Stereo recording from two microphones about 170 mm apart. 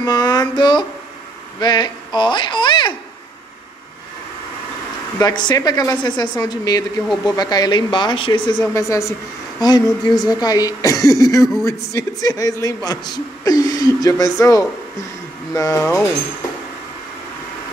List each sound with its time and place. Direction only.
0.0 s a sound: 25° left (ahead or behind)
1.6 s speech: 25° left (ahead or behind)
5.2 s a man's voice: 25° left (ahead or behind)